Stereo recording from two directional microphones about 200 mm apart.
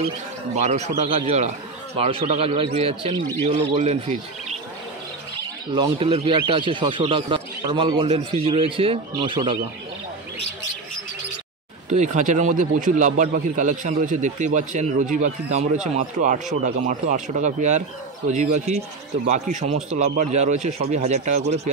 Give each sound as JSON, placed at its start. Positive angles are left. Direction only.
{"t": 0.6, "sound": "a man's voice", "side_deg": -35}
{"t": 5.7, "sound": "a man's voice", "side_deg": -25}
{"t": 11.9, "sound": "a man's voice", "side_deg": -35}